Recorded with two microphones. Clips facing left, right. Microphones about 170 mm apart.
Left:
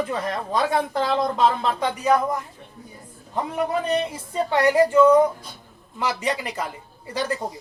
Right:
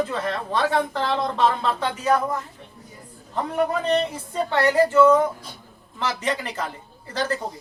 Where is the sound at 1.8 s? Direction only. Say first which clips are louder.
Left 3 dB; 15° left (ahead or behind).